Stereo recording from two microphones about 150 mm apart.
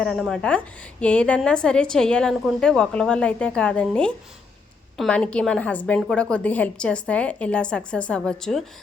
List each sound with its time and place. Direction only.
0.0 s a woman's voice: centre (ahead or behind)